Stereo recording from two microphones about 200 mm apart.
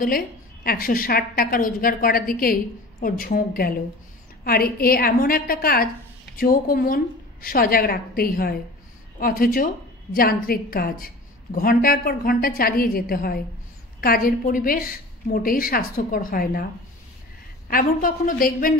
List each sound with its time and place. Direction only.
0.7 s a woman's voice: 45° left (ahead or behind)
17.6 s a woman's voice: 45° left (ahead or behind)